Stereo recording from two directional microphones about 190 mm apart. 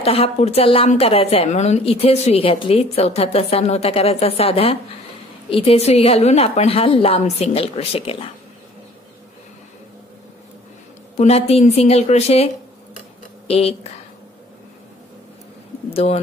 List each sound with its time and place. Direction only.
0.0 s a woman's voice: 30° left (ahead or behind)
11.1 s a woman's voice: 35° left (ahead or behind)
13.5 s speech: 30° left (ahead or behind)
15.9 s speech: 30° left (ahead or behind)